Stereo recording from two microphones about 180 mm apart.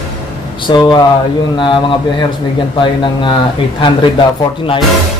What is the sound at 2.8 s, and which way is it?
A man's voice, 25° left (ahead or behind).